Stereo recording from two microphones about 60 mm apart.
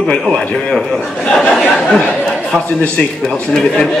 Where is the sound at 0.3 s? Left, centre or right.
Centre.